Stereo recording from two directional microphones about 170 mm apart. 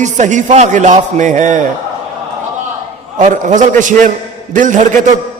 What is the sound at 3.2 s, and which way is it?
A man's voice, 50° right (ahead or behind).